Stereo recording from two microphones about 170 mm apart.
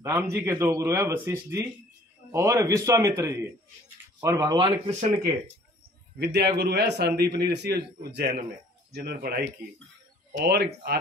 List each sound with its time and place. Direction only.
0.0 s speech: 15° right (ahead or behind)
6.1 s a man's voice: 75° right (ahead or behind)